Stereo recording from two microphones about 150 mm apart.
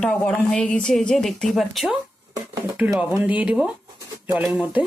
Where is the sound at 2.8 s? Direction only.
15° right (ahead or behind).